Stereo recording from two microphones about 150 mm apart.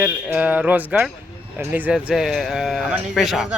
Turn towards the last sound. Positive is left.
turn(degrees=0)  # may be behind; listen again after turning